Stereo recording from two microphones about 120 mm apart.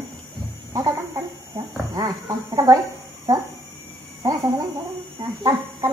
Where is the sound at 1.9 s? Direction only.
30° right (ahead or behind).